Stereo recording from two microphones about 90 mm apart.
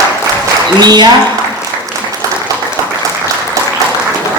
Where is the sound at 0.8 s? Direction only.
50° right (ahead or behind).